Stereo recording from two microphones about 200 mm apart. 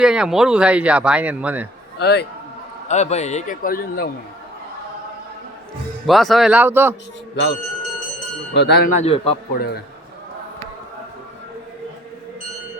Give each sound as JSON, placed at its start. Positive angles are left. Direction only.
{"t": 0.0, "sound": "speech", "side_deg": -5}
{"t": 2.0, "sound": "speech", "side_deg": 55}
{"t": 2.9, "sound": "a man's voice", "side_deg": 35}
{"t": 6.1, "sound": "speech", "side_deg": 0}
{"t": 8.5, "sound": "speech", "side_deg": 60}
{"t": 8.9, "sound": "a man's voice", "side_deg": 30}
{"t": 9.6, "sound": "a man's voice", "side_deg": 55}